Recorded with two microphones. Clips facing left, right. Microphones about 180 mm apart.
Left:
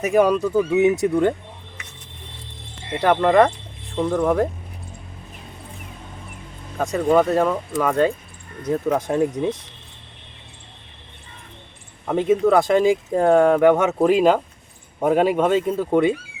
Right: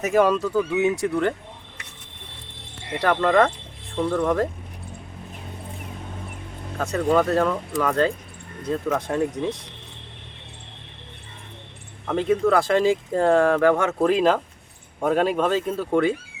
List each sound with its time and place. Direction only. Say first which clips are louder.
0.0 s speech: left 2 dB; 15° left (ahead or behind)
3.0 s speech: left 3 dB; 15° left (ahead or behind)
6.7 s speech: left 3 dB; 15° left (ahead or behind)
12.0 s speech: left 3 dB; 15° left (ahead or behind)